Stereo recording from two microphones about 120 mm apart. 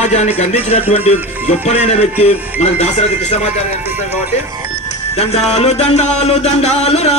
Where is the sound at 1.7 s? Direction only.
60° left (ahead or behind).